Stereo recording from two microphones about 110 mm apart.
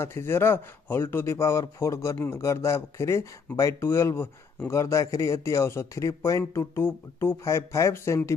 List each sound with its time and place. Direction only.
0.0 s a man's voice: 25° left (ahead or behind)